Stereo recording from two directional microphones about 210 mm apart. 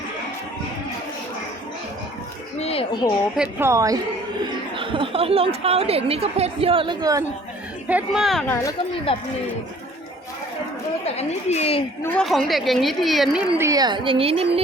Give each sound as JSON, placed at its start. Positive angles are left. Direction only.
{"t": 2.6, "sound": "a sound", "side_deg": 30}
{"t": 3.3, "sound": "a woman's voice", "side_deg": -10}
{"t": 7.9, "sound": "a woman's voice", "side_deg": -5}
{"t": 9.1, "sound": "speech", "side_deg": 25}
{"t": 11.0, "sound": "a woman's voice", "side_deg": 30}
{"t": 12.0, "sound": "a woman's voice", "side_deg": 5}
{"t": 13.6, "sound": "speech", "side_deg": -15}